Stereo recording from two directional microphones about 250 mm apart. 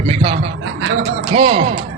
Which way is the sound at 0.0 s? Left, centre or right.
Right.